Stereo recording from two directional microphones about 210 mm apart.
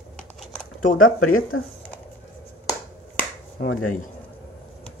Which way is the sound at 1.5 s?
80° left.